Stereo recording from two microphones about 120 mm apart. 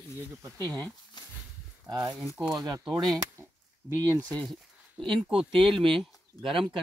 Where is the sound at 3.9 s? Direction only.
25° right (ahead or behind).